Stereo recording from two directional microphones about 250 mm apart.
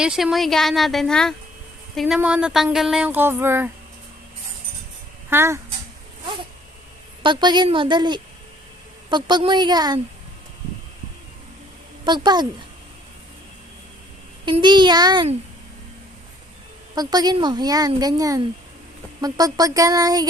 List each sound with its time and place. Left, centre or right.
0.0 s speech: centre
5.3 s speech: centre
7.2 s speech: centre
12.0 s speech: centre
14.4 s speech: centre
16.9 s speech: centre